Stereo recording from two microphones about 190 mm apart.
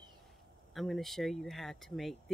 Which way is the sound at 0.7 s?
Centre (ahead or behind).